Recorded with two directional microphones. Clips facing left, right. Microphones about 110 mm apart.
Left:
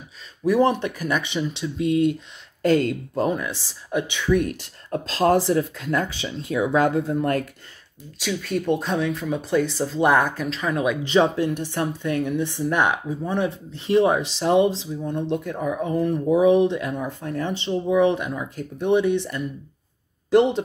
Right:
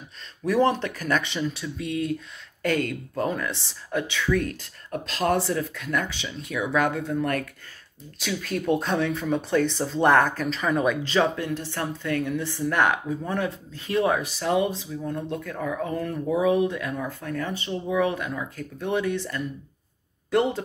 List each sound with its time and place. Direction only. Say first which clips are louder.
0.4 s speech: left 3 dB; 15° left (ahead or behind)
8.2 s speech: left 3 dB; centre (ahead or behind)
11.0 s speech: left 4 dB; 20° left (ahead or behind)